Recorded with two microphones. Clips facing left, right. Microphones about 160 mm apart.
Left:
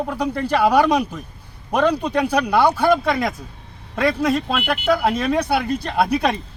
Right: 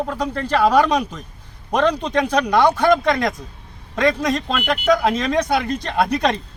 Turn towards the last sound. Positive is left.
turn(degrees=10)  # may be behind; listen again after turning